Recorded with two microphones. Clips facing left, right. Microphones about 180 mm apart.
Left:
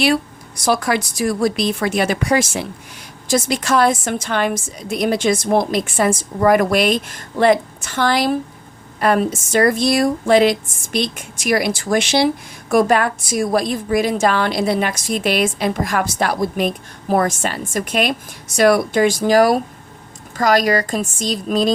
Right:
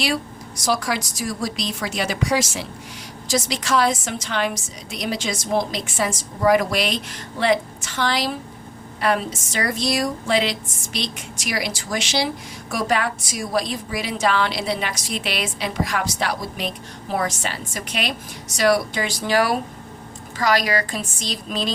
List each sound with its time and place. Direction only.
0.6 s a woman's voice: 55° left (ahead or behind)